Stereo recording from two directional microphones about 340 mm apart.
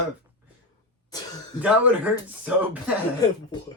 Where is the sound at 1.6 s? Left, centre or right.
Centre.